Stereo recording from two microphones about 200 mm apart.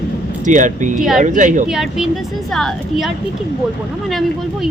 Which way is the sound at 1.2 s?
40° right (ahead or behind).